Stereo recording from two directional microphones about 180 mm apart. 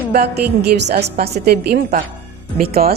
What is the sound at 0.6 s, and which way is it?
Speech, 65° right (ahead or behind).